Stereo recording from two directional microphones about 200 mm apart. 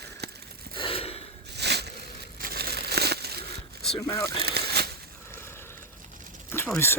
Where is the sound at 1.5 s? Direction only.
55° right (ahead or behind).